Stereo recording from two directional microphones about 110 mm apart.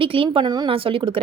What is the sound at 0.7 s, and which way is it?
Speech, 55° right (ahead or behind).